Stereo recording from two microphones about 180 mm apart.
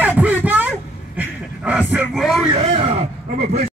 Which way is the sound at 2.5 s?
35° right (ahead or behind).